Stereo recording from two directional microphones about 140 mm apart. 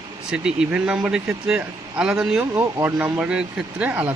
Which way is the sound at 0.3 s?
5° right (ahead or behind).